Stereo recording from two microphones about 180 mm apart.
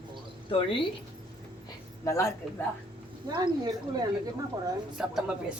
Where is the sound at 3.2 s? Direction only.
20° right (ahead or behind).